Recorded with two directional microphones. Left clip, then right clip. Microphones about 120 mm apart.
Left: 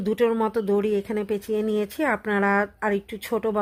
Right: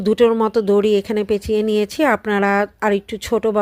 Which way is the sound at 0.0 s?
30° right (ahead or behind).